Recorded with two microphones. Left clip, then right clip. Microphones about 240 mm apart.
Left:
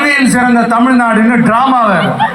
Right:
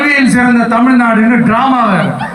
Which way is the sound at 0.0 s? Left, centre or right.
Left.